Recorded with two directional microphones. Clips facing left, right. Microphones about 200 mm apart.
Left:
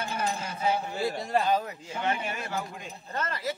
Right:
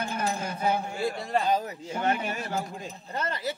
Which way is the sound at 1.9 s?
45° right (ahead or behind).